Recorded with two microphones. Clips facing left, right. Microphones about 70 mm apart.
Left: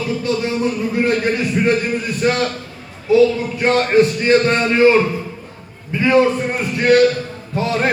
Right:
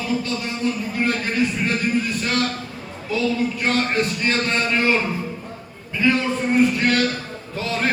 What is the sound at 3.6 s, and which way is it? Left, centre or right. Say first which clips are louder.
A man's voice: left 12 dB; left.